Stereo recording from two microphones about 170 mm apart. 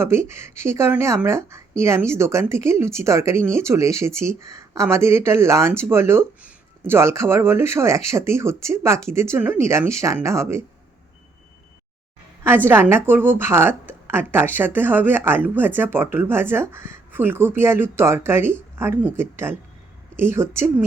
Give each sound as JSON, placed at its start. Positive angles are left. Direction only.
{"t": 0.0, "sound": "speech", "side_deg": -15}
{"t": 12.4, "sound": "speech", "side_deg": -15}